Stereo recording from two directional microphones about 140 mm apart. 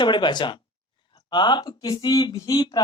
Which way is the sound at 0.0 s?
35° left (ahead or behind).